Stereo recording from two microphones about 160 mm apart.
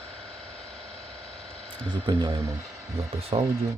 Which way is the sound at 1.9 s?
30° right (ahead or behind).